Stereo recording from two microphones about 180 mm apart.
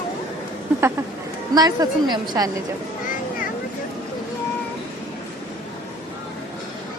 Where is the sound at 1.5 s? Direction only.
20° right (ahead or behind).